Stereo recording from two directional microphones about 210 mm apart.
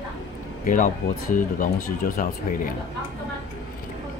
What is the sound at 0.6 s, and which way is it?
Speech, 40° left (ahead or behind).